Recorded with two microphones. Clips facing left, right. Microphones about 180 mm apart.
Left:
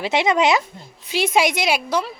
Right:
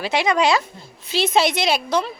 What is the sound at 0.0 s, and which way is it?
A woman's voice, 20° left (ahead or behind).